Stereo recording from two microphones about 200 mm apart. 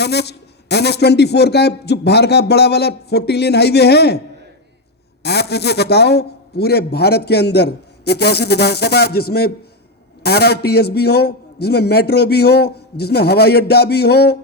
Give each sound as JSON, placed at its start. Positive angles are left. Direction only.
{"t": 0.0, "sound": "a man's voice", "side_deg": 55}
{"t": 5.2, "sound": "a man's voice", "side_deg": 55}